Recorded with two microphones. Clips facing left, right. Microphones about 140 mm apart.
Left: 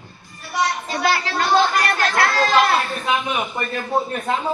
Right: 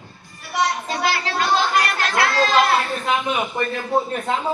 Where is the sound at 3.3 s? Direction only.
Centre (ahead or behind).